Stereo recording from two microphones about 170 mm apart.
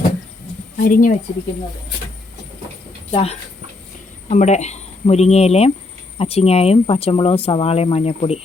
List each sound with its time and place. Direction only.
0.8 s speech: 55° left (ahead or behind)
3.1 s speech: 35° left (ahead or behind)